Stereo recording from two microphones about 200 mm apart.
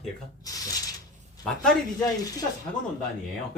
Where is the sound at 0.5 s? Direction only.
15° left (ahead or behind).